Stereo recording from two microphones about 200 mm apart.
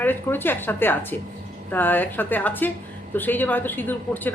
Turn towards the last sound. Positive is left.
turn(degrees=10)  # may be behind; listen again after turning